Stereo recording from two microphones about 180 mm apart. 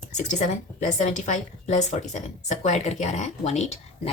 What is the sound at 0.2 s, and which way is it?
A woman's voice, 40° left (ahead or behind).